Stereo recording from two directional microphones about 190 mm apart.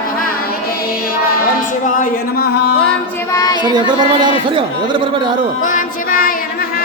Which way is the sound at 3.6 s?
25° right (ahead or behind).